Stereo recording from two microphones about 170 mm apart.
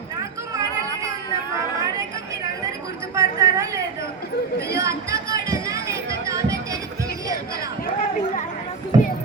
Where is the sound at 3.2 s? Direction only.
20° right (ahead or behind).